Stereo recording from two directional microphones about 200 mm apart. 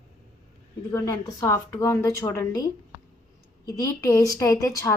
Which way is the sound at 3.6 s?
15° left (ahead or behind).